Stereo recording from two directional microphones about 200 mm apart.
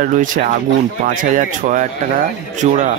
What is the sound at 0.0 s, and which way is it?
Speech, 40° right (ahead or behind).